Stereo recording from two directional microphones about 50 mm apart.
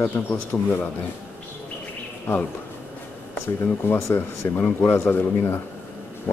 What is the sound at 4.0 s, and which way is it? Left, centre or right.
Speech, left.